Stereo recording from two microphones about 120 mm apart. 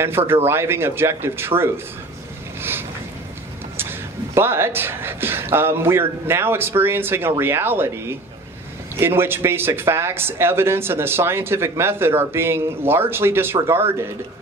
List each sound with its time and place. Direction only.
0.5 s speech: 20° right (ahead or behind)
3.7 s speech: 20° right (ahead or behind)